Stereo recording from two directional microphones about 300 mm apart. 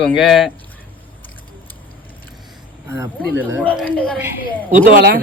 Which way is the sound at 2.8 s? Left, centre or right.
Centre.